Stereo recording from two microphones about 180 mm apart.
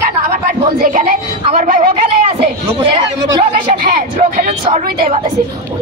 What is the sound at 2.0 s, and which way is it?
Chatter, 30° right (ahead or behind).